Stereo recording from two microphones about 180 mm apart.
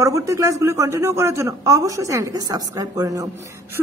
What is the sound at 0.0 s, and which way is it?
Speech, 15° right (ahead or behind).